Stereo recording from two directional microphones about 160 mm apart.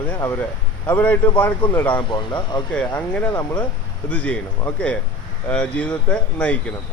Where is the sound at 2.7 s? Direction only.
10° left (ahead or behind).